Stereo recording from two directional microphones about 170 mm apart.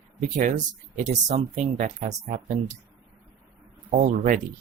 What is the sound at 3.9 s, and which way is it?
Speech, 45° right (ahead or behind).